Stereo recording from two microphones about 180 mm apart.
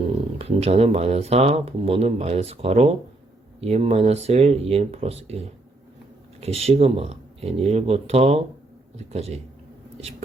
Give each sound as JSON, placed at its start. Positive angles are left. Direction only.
{"t": 0.0, "sound": "speech", "side_deg": -30}
{"t": 6.4, "sound": "speech", "side_deg": -35}